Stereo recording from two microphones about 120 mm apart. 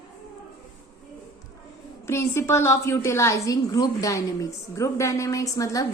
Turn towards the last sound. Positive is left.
turn(degrees=30)  # may be behind; listen again after turning